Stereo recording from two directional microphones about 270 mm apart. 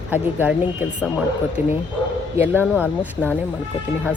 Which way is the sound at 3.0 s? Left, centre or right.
Centre.